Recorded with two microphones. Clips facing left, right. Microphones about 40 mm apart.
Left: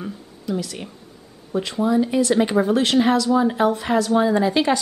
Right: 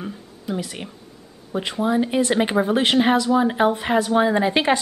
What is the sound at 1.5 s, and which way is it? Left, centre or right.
Speech, right.